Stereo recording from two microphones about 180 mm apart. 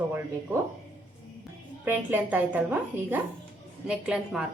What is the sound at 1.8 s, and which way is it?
A woman's voice, 10° right (ahead or behind).